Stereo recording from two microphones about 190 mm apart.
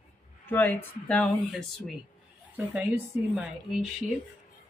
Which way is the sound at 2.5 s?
5° right (ahead or behind).